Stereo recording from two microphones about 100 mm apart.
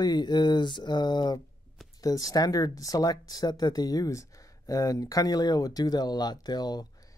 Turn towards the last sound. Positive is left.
turn(degrees=40)  # may be behind; listen again after turning